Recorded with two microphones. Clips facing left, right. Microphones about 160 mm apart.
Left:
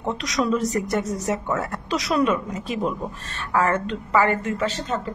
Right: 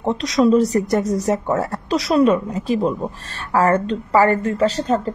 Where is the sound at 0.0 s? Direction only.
30° right (ahead or behind).